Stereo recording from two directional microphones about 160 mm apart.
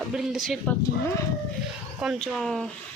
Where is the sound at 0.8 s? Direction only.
20° left (ahead or behind).